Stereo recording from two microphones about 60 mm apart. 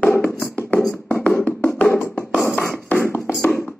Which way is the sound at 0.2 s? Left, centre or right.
Left.